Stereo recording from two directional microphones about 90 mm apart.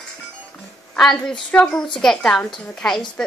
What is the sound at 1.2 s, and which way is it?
Speech, 10° left (ahead or behind).